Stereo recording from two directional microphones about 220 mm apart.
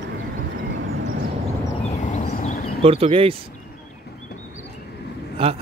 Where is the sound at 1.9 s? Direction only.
30° left (ahead or behind).